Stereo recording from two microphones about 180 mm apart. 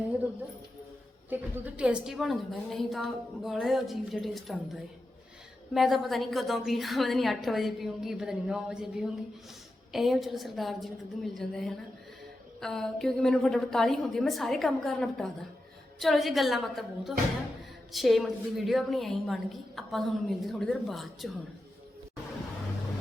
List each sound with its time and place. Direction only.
1.3 s a woman's voice: 10° right (ahead or behind)